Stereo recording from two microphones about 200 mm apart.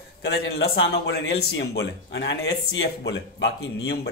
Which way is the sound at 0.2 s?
60° left (ahead or behind).